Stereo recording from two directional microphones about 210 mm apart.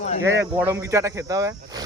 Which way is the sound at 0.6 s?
15° right (ahead or behind).